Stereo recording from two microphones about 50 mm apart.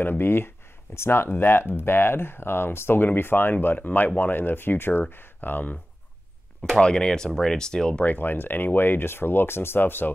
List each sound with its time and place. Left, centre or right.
0.2 s speech: left
6.8 s speech: centre
8.0 s speech: left